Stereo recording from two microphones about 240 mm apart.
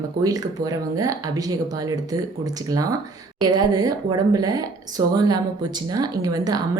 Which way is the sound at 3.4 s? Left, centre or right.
Centre.